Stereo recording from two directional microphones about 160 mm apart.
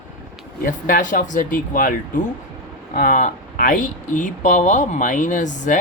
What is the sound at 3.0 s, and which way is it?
Speech, 55° left (ahead or behind).